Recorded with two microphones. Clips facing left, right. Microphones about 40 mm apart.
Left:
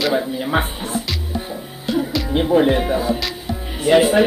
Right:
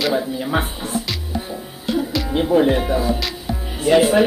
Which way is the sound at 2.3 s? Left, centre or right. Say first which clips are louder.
Left 1 dB; centre.